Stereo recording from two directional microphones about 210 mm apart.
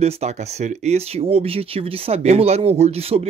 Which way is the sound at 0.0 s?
30° right (ahead or behind).